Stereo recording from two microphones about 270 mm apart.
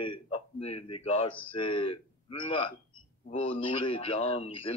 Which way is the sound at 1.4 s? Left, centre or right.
Centre.